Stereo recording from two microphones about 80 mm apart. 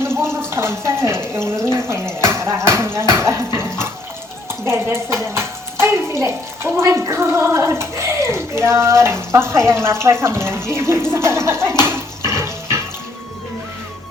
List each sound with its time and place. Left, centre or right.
0.5 s speech: right
12.3 s water: right